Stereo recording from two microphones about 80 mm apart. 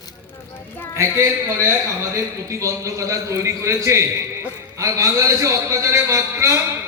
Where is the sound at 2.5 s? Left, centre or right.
Right.